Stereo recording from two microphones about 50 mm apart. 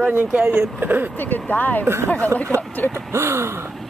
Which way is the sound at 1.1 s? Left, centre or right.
Left.